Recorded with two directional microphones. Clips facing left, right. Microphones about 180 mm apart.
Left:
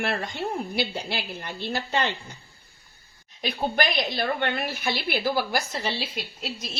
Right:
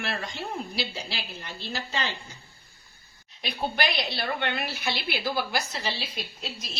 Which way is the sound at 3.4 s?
45° left (ahead or behind).